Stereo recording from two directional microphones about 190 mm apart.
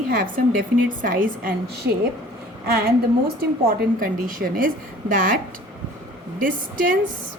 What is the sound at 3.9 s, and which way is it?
A woman's voice, 45° right (ahead or behind).